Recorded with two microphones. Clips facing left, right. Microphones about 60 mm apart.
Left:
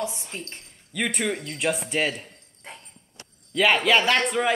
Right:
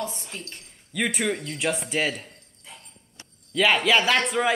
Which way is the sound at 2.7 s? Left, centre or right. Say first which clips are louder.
Left 4 dB; left.